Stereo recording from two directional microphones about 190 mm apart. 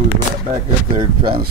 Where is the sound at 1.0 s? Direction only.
25° right (ahead or behind).